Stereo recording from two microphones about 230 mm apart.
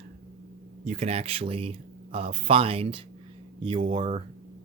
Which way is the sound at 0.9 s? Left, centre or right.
Right.